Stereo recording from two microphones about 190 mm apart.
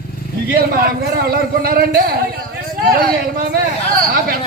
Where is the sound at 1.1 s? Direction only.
55° right (ahead or behind).